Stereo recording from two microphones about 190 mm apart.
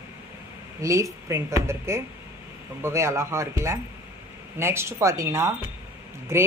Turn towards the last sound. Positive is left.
turn(degrees=-15)  # may be behind; listen again after turning